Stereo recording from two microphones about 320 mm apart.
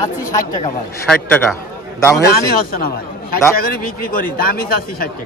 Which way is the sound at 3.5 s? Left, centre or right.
Left.